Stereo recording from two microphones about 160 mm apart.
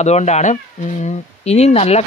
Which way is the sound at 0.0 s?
45° left (ahead or behind).